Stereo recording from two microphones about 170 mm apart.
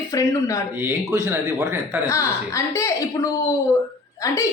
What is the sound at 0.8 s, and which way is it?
Speech, 15° right (ahead or behind).